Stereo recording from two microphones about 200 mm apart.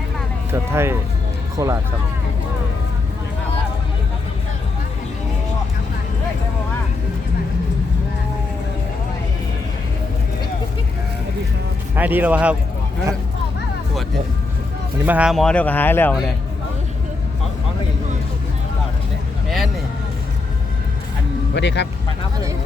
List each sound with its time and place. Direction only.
0.7 s speech: 10° right (ahead or behind)
11.9 s speech: 10° right (ahead or behind)
15.0 s speech: 5° right (ahead or behind); by 16.1 s 10° left (ahead or behind)
21.5 s speech: 60° left (ahead or behind)